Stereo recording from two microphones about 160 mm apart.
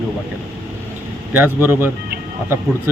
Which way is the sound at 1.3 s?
10° right (ahead or behind).